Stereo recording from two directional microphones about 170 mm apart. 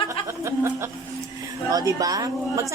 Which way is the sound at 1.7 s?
20° right (ahead or behind).